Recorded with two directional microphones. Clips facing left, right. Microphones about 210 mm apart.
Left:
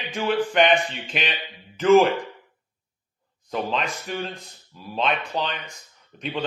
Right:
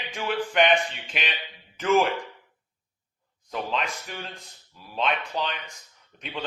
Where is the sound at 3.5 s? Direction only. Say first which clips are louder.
Left 3 dB; 30° left (ahead or behind).